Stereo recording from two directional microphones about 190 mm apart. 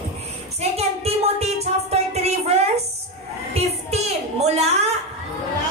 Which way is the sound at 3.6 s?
35° right (ahead or behind).